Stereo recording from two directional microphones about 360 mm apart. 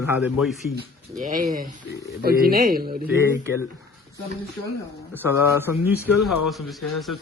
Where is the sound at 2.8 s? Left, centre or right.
Centre.